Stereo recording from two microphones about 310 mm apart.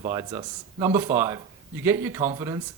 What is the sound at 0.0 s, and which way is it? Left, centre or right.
A man's voice, centre.